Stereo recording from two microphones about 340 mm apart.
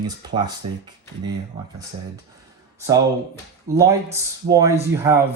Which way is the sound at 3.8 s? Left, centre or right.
Centre.